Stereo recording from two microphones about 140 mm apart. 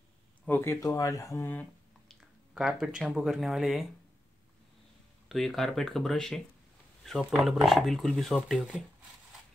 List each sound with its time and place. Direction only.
0.5 s speech: 15° left (ahead or behind)
2.1 s speech: 5° right (ahead or behind)
5.3 s speech: centre (ahead or behind)